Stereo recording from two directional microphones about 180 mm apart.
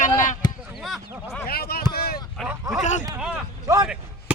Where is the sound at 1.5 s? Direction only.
60° left (ahead or behind).